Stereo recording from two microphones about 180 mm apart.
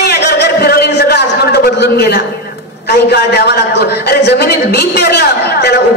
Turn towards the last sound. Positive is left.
turn(degrees=65)  # may be behind; listen again after turning